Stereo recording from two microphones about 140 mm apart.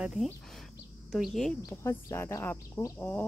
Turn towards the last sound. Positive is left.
turn(degrees=15)  # may be behind; listen again after turning